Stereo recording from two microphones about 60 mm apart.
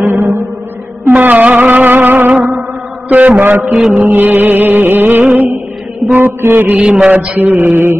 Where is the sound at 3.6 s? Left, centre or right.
Centre.